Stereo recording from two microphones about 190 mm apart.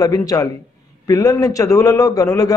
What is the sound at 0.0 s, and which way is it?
A man's voice, 20° left (ahead or behind).